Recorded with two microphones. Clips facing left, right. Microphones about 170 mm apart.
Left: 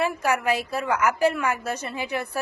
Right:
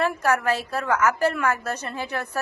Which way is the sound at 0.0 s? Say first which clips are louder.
Right 1 dB; 10° left (ahead or behind).